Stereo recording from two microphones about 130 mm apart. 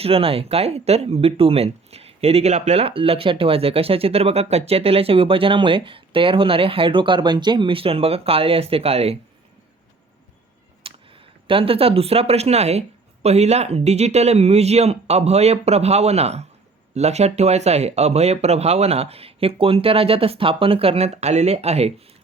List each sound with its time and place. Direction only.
0.0 s speech: 45° right (ahead or behind)
10.8 s a sound: 45° right (ahead or behind)
11.4 s speech: 45° right (ahead or behind)